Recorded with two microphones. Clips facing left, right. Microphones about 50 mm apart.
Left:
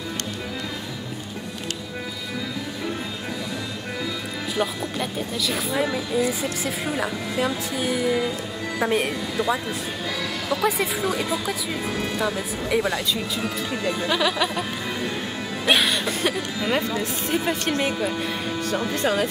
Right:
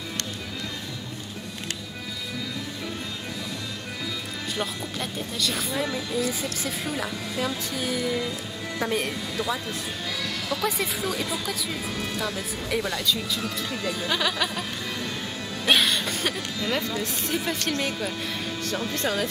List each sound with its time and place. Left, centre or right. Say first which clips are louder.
4.6 s speech: left 6 dB; centre
15.6 s music: left 2 dB; centre
16.7 s speech: left 4 dB; centre